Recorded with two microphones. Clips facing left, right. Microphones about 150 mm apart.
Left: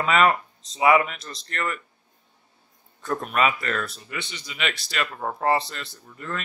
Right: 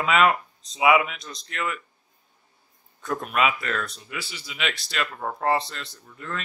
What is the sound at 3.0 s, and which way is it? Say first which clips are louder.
Speech: left 1 dB; centre (ahead or behind).